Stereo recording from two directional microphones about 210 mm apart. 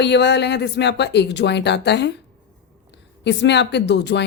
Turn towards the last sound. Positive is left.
turn(degrees=55)  # may be behind; listen again after turning